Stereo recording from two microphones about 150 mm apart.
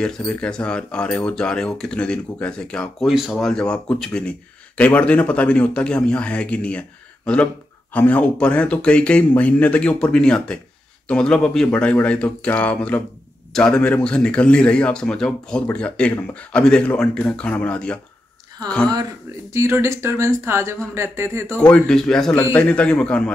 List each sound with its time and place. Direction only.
0.0 s speech: 5° left (ahead or behind)
19.5 s speech: 20° right (ahead or behind)
21.5 s speech: 5° left (ahead or behind)